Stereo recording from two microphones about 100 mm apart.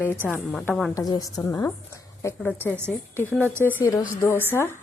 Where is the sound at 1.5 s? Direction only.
30° left (ahead or behind).